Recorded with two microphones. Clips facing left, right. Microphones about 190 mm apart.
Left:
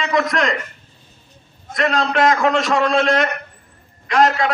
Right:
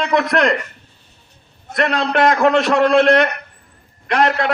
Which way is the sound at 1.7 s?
60° right (ahead or behind).